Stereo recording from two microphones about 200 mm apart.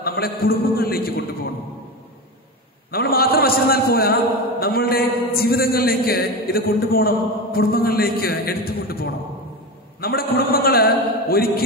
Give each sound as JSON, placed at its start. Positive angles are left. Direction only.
{"t": 0.0, "sound": "a man's voice", "side_deg": 50}
{"t": 2.9, "sound": "a man's voice", "side_deg": 50}